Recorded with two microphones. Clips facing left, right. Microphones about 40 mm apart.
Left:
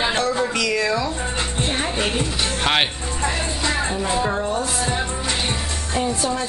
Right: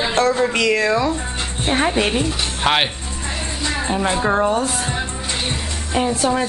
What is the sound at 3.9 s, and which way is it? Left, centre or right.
Speech, right.